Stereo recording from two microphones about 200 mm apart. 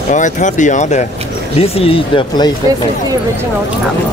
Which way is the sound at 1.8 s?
25° left (ahead or behind).